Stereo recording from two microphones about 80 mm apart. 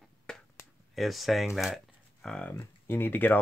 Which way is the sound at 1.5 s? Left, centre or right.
Centre.